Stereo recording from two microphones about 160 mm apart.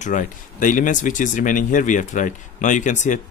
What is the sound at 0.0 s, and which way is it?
Speech, 50° left (ahead or behind).